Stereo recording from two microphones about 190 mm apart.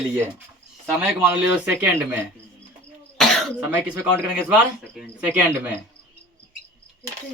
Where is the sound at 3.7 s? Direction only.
10° right (ahead or behind).